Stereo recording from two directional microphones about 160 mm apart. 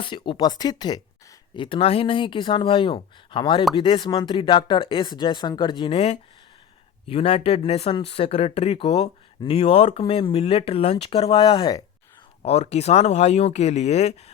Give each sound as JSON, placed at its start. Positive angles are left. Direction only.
{"t": 0.0, "sound": "speech", "side_deg": 30}
{"t": 12.4, "sound": "speech", "side_deg": 40}